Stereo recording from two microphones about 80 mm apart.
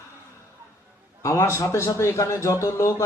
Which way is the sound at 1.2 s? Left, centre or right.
Left.